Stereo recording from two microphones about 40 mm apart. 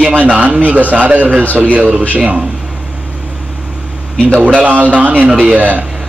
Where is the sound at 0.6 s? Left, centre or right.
Right.